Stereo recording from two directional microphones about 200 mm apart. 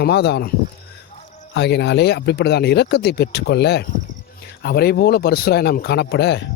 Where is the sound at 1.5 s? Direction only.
60° left (ahead or behind).